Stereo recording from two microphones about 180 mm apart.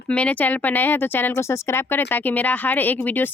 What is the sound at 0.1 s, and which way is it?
Speech, 5° left (ahead or behind).